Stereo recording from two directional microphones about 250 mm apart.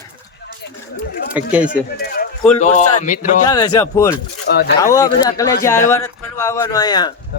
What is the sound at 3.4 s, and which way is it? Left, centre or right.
Speech, centre.